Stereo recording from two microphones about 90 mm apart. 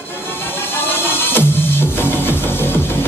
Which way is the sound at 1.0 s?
25° left (ahead or behind).